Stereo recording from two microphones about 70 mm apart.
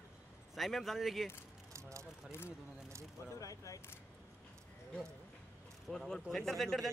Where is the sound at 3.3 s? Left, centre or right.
Left.